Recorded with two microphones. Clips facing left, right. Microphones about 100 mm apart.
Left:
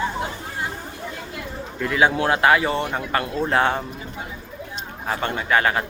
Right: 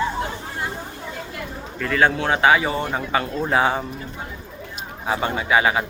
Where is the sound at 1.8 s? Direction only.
10° left (ahead or behind).